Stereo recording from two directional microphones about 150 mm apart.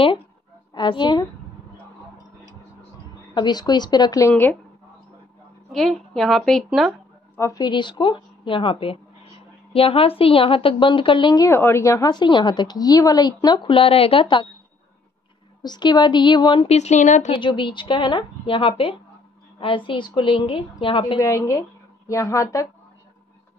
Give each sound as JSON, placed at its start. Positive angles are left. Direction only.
{"t": 0.7, "sound": "speech", "side_deg": 30}
{"t": 3.3, "sound": "speech", "side_deg": 25}
{"t": 5.7, "sound": "a woman's voice", "side_deg": 0}
{"t": 7.3, "sound": "a woman's voice", "side_deg": 20}
{"t": 15.6, "sound": "speech", "side_deg": 30}
{"t": 16.6, "sound": "speech", "side_deg": 45}
{"t": 17.4, "sound": "a woman's voice", "side_deg": 30}
{"t": 21.2, "sound": "speech", "side_deg": 20}